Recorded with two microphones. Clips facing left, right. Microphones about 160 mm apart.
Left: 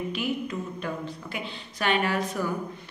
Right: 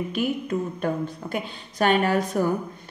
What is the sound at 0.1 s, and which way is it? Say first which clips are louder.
A woman's voice: right 4 dB; 50° right (ahead or behind).